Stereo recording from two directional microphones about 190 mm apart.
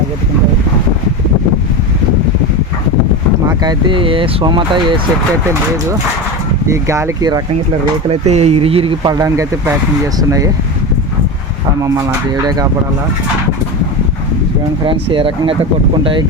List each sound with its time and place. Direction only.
3.6 s speech: 25° right (ahead or behind)
6.7 s speech: 15° right (ahead or behind)
8.3 s speech: 35° right (ahead or behind); by 10.5 s 15° right (ahead or behind)
14.8 s speech: 30° right (ahead or behind)